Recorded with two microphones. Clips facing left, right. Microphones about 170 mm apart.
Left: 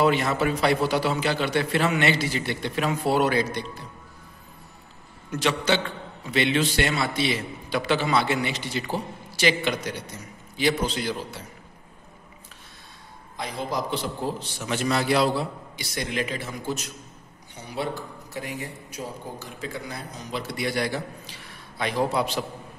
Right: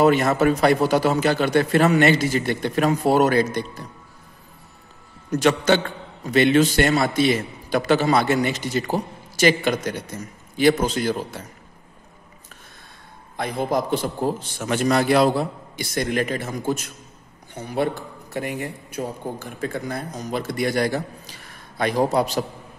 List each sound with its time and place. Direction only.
0.0 s a man's voice: 45° right (ahead or behind)
5.3 s a man's voice: 45° right (ahead or behind)
13.4 s a man's voice: 55° right (ahead or behind)